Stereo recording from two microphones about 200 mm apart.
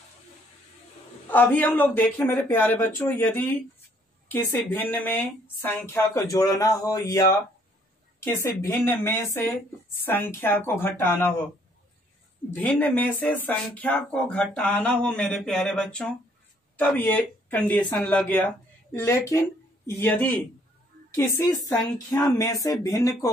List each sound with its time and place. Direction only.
1.3 s speech: 10° left (ahead or behind)
12.4 s speech: 10° left (ahead or behind)